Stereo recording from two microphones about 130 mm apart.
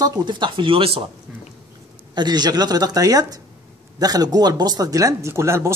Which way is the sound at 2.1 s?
35° right (ahead or behind).